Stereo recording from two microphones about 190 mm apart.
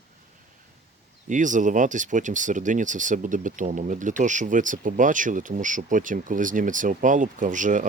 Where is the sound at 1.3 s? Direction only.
40° right (ahead or behind).